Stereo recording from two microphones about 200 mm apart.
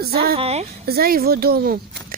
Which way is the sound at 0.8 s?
50° right (ahead or behind).